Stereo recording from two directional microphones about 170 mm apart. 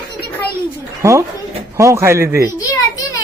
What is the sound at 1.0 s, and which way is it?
Speech, 15° right (ahead or behind).